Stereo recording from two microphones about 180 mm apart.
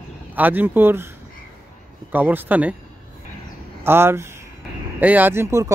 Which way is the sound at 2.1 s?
10° right (ahead or behind).